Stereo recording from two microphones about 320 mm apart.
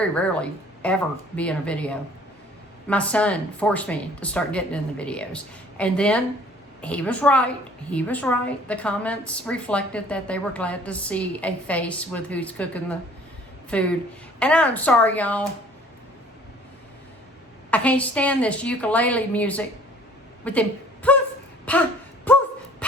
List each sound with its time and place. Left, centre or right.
0.0 s a woman's voice: centre
17.7 s a woman's voice: centre
20.4 s a sound: centre
21.7 s throat clearing: centre
22.8 s dog: centre